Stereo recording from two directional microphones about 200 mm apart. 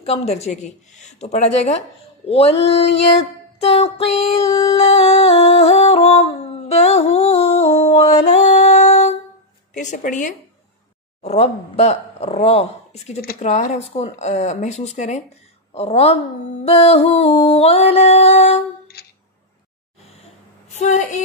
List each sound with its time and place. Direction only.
0.0 s female singing: 30° left (ahead or behind)
4.7 s humming: 30° left (ahead or behind)
9.8 s female singing: 40° left (ahead or behind)
16.6 s music: 30° left (ahead or behind)
20.7 s a woman's voice: 35° left (ahead or behind)